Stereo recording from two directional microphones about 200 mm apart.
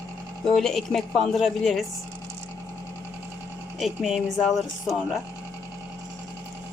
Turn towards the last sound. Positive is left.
turn(degrees=0)  # may be behind; listen again after turning